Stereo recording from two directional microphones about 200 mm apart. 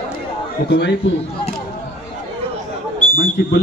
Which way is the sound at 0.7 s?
55° left (ahead or behind).